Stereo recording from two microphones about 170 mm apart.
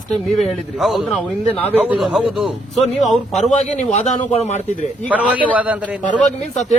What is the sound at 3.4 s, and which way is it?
A man's voice, 45° left (ahead or behind).